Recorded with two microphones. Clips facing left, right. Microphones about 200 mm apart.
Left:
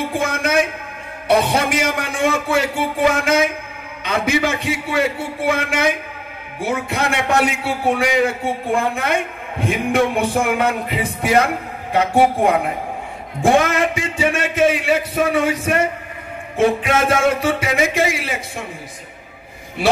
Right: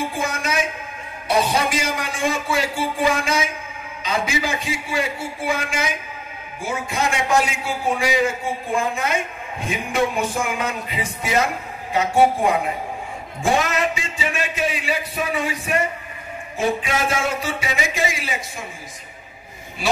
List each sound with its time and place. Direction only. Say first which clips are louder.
0.0 s a man's voice: left 4 dB; 60° left (ahead or behind)